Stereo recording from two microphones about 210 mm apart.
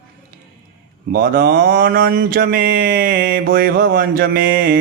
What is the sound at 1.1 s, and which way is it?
Mantra, 45° right (ahead or behind).